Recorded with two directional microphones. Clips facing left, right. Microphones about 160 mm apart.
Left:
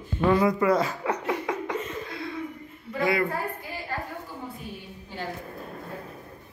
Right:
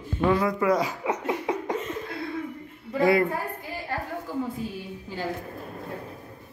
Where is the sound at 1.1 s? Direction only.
25° right (ahead or behind).